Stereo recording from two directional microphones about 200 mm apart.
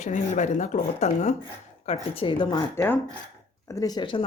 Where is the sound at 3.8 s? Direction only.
20° left (ahead or behind).